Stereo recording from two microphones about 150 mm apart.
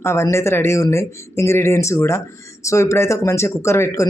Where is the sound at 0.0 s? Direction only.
20° left (ahead or behind).